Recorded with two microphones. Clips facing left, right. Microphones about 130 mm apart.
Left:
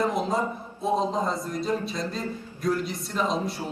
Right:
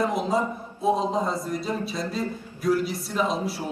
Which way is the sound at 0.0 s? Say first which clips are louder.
Right 1 dB; centre (ahead or behind).